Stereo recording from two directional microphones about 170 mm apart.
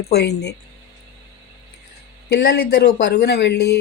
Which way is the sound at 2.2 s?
80° left.